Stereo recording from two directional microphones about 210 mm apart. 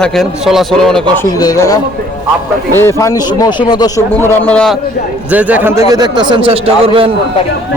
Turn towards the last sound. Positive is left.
turn(degrees=-25)  # may be behind; listen again after turning